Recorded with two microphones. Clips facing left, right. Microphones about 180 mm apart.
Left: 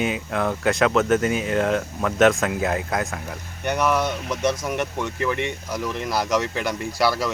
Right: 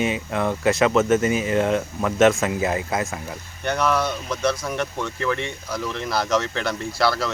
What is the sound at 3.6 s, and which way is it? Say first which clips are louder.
Speech: even; 15° left (ahead or behind).